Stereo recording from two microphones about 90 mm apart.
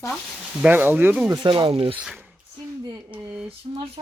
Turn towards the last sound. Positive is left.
turn(degrees=-70)  # may be behind; listen again after turning